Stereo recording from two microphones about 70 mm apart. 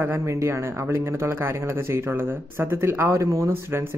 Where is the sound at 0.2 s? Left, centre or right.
Right.